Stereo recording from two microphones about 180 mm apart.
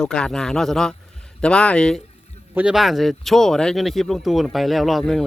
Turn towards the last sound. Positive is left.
turn(degrees=0)  # may be behind; listen again after turning